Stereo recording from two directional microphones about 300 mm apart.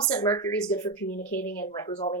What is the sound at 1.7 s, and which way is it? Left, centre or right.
Speech, centre.